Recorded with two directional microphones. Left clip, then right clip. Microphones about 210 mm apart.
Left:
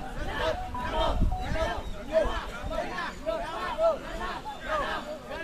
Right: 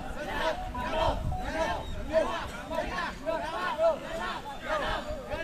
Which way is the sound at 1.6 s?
35° right (ahead or behind).